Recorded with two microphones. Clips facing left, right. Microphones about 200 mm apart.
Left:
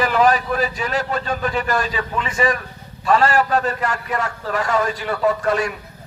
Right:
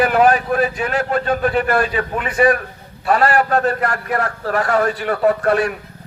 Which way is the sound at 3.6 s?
55° right (ahead or behind).